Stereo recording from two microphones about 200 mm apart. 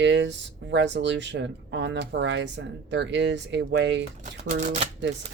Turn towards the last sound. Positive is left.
turn(degrees=-35)  # may be behind; listen again after turning